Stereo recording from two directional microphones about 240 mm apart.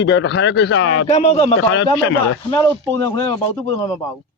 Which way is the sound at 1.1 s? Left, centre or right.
Left.